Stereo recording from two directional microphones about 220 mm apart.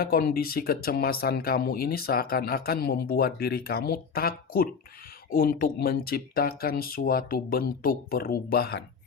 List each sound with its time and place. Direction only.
0.0 s speech: 40° left (ahead or behind)